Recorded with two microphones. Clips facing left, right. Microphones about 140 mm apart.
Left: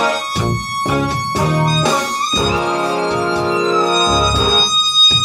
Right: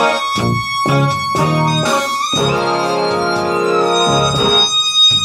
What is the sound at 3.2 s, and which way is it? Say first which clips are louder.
Organ: right 1 dB; centre (ahead or behind).